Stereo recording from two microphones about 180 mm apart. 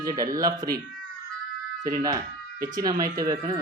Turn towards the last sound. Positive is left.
turn(degrees=-20)  # may be behind; listen again after turning